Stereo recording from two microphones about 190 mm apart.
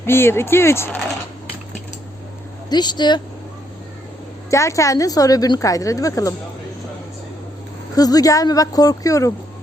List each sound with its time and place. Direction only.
0.0 s a woman's voice: 10° left (ahead or behind)
2.6 s speech: 20° left (ahead or behind)
4.5 s a woman's voice: 15° left (ahead or behind)
7.9 s speech: 20° left (ahead or behind)